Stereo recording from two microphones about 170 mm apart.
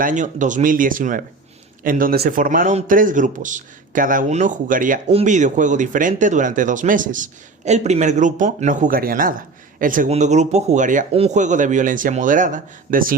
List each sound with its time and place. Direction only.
0.0 s speech: 50° right (ahead or behind)